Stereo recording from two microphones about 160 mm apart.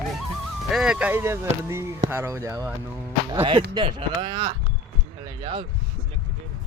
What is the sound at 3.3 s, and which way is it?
Speech, 30° right (ahead or behind).